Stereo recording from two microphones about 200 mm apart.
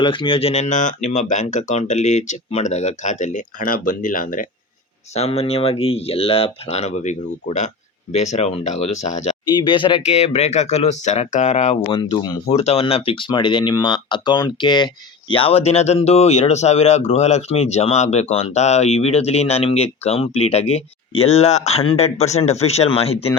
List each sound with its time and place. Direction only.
0.0 s speech: 25° left (ahead or behind); by 4.4 s 45° left (ahead or behind)
5.1 s speech: 30° left (ahead or behind)
9.5 s speech: 25° left (ahead or behind)